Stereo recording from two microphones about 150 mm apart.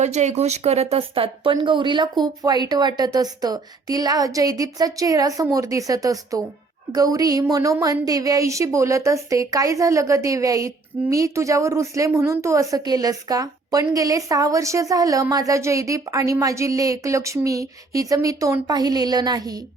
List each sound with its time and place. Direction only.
0.0 s a woman's voice: 50° right (ahead or behind); by 19.6 s 25° right (ahead or behind)